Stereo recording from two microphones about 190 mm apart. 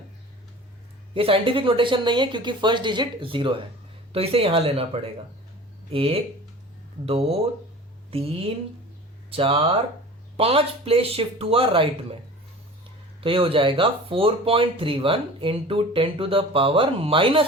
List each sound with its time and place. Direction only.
1.1 s speech: 30° right (ahead or behind)
13.2 s speech: 30° right (ahead or behind)